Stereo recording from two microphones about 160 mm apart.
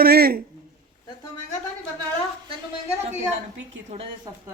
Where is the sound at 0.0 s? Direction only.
70° right (ahead or behind).